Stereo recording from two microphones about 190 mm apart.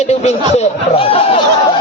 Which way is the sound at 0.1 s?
35° left (ahead or behind).